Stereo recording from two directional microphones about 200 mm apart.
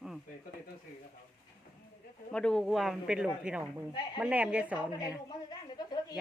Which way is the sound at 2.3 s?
5° left (ahead or behind).